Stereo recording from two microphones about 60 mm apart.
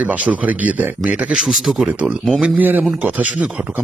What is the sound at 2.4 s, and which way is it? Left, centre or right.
Speech, centre.